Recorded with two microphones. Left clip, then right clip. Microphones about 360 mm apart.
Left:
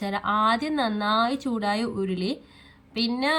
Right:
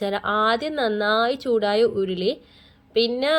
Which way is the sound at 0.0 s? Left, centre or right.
Centre.